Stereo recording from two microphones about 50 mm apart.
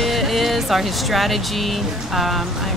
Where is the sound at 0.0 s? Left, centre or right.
Centre.